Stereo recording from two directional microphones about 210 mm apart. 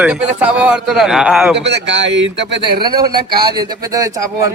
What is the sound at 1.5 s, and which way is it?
Speech, 55° right (ahead or behind).